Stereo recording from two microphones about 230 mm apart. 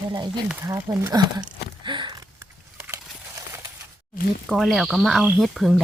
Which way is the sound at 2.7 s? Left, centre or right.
Centre.